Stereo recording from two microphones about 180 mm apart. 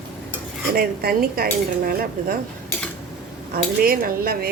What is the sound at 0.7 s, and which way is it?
Speech, 55° right (ahead or behind).